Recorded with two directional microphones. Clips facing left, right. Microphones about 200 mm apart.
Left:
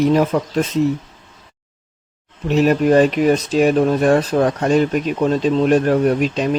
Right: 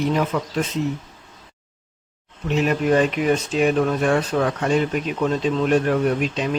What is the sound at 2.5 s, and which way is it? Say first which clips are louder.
Speech: left 5 dB; 40° left (ahead or behind).